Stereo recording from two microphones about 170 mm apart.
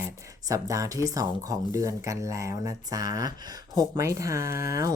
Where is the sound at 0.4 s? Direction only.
20° right (ahead or behind).